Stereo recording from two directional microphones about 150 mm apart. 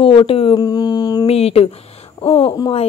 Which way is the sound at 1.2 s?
45° left (ahead or behind).